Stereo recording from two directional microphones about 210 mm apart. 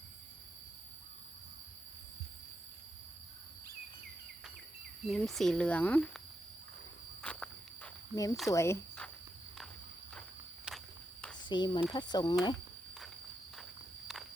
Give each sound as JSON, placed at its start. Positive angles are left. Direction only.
{"t": 5.0, "sound": "speech", "side_deg": 0}
{"t": 7.2, "sound": "walk", "side_deg": 5}
{"t": 8.1, "sound": "speech", "side_deg": 15}
{"t": 10.7, "sound": "walk", "side_deg": -5}
{"t": 11.4, "sound": "speech", "side_deg": 20}